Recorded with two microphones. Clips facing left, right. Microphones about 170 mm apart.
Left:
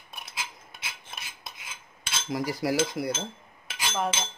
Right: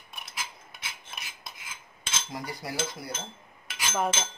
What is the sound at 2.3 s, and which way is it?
Speech, 90° left.